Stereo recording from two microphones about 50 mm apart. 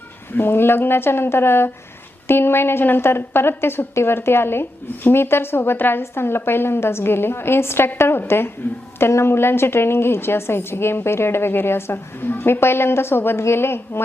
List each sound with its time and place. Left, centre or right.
0.3 s a woman's voice: left
8.6 s a woman's voice: left
9.0 s a woman's voice: left